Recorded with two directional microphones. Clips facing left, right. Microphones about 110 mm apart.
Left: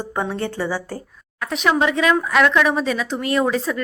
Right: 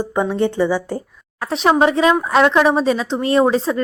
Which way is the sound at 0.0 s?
15° right (ahead or behind).